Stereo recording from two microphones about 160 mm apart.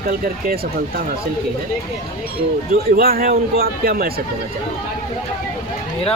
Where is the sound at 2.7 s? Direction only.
70° right (ahead or behind).